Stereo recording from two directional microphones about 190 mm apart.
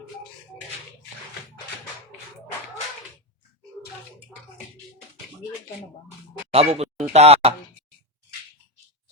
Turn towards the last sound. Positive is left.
turn(degrees=-35)  # may be behind; listen again after turning